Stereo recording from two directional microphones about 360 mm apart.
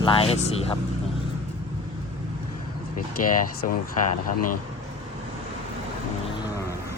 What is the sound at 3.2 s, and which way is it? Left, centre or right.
Speech, left.